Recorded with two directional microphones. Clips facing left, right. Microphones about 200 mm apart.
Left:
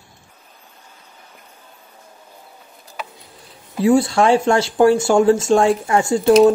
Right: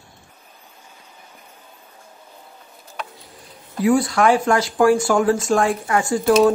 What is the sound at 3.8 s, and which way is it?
Speech, 25° left (ahead or behind).